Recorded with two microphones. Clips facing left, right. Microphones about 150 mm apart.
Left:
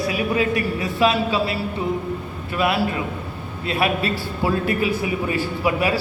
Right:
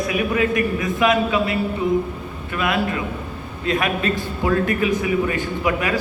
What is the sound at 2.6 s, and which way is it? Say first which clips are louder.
A man's voice: left 1 dB; 30° left (ahead or behind).